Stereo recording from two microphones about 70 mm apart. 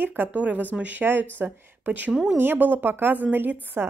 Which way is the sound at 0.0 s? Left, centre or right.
Right.